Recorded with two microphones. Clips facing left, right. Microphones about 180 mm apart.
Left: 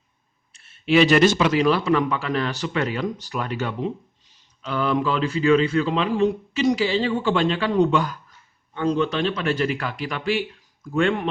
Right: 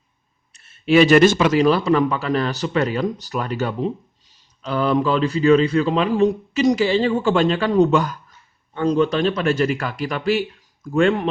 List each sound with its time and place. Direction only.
0.5 s a man's voice: 40° right (ahead or behind)